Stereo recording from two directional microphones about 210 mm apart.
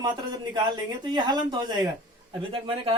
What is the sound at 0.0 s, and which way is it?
A man's voice, 20° right (ahead or behind).